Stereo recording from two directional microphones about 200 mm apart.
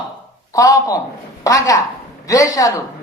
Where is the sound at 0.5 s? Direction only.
15° left (ahead or behind).